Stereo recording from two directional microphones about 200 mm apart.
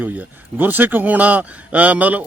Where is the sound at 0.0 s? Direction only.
10° right (ahead or behind).